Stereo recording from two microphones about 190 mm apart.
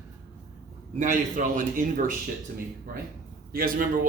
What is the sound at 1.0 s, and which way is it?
A man's voice, 45° right (ahead or behind).